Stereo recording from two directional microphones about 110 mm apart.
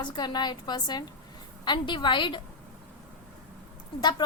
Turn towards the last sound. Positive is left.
turn(degrees=40)  # may be behind; listen again after turning